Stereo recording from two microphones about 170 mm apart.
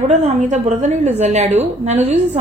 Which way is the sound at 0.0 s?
45° right (ahead or behind).